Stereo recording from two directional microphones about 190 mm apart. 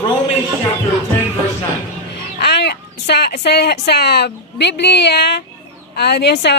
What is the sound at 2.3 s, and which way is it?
Speech, 60° left (ahead or behind).